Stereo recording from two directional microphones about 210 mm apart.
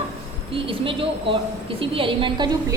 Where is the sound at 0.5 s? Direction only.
25° right (ahead or behind).